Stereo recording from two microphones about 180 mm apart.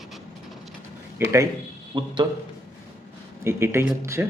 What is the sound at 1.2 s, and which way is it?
Speech, 15° right (ahead or behind).